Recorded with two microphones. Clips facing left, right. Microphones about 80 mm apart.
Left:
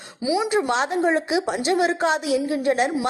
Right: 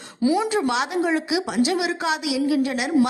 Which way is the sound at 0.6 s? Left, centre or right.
Left.